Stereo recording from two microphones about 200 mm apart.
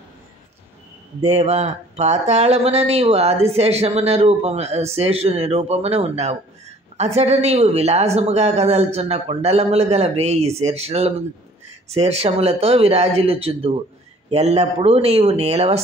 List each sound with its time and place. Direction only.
1.3 s speech: 35° right (ahead or behind)